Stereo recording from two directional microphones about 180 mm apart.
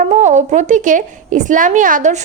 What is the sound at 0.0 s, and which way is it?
A woman's voice, 40° right (ahead or behind).